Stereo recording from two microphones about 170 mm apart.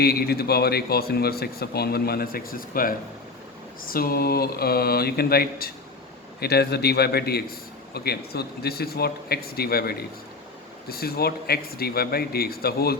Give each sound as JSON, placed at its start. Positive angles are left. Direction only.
{"t": 0.0, "sound": "speech", "side_deg": 65}